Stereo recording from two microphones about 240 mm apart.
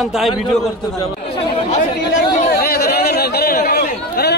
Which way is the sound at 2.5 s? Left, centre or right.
Left.